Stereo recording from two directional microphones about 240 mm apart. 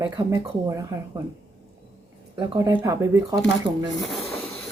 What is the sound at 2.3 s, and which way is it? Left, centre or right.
Speech, centre.